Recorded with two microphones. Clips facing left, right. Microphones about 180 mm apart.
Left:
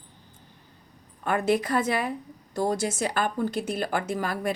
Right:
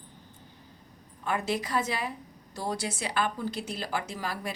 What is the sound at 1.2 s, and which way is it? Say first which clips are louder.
A woman's voice: left 6 dB; 55° left (ahead or behind).